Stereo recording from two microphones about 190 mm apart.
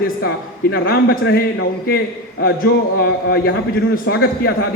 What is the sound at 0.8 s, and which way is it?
Speech, 55° left (ahead or behind).